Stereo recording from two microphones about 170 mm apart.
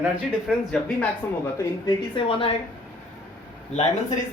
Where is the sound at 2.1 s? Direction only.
35° left (ahead or behind).